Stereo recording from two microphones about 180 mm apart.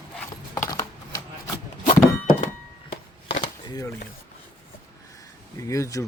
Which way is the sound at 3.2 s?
30° left (ahead or behind).